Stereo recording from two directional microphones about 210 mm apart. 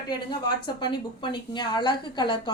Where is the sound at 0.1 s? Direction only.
20° left (ahead or behind).